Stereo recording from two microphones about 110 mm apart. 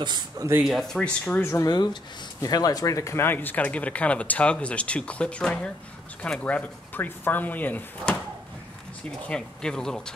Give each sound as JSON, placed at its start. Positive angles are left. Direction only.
{"t": 0.4, "sound": "speech", "side_deg": -20}
{"t": 0.7, "sound": "speech", "side_deg": 0}
{"t": 1.4, "sound": "speech", "side_deg": 25}
{"t": 1.7, "sound": "speech", "side_deg": 40}
{"t": 9.3, "sound": "speech", "side_deg": 5}